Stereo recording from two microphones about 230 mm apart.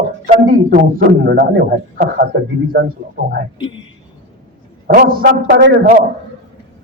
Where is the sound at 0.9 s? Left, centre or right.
Right.